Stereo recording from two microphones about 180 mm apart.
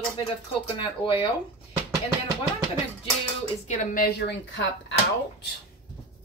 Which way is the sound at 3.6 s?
40° left (ahead or behind).